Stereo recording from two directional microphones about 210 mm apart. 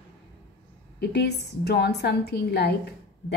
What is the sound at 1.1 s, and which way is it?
A woman's voice, 50° left (ahead or behind).